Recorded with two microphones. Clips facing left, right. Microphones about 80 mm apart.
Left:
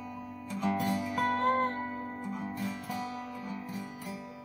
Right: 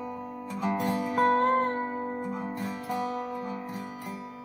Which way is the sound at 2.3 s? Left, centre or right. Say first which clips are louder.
Right 3 dB; centre.